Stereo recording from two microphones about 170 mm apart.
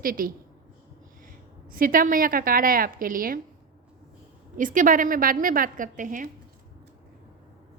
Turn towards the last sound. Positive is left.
turn(degrees=-50)  # may be behind; listen again after turning